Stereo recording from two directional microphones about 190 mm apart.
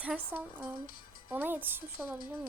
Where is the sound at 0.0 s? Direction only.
10° right (ahead or behind).